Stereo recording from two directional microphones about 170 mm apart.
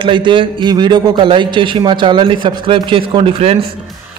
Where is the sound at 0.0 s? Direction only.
30° right (ahead or behind).